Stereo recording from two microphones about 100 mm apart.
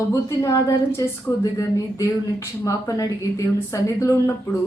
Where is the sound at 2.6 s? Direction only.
35° left (ahead or behind).